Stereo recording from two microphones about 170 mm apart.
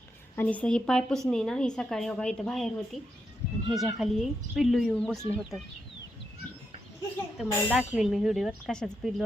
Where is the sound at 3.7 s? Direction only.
Centre (ahead or behind).